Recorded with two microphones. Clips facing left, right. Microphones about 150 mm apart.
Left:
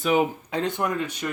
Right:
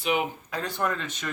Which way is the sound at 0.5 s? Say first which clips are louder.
Left 4 dB; 20° left (ahead or behind).